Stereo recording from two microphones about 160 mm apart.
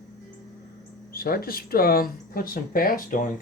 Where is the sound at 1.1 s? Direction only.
70° left (ahead or behind).